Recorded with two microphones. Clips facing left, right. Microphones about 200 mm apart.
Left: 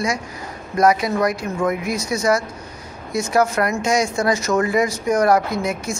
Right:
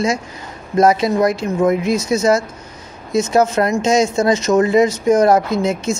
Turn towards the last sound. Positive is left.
turn(degrees=-25)  # may be behind; listen again after turning